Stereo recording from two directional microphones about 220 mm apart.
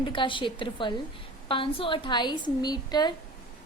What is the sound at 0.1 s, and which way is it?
A woman's voice, 20° left (ahead or behind).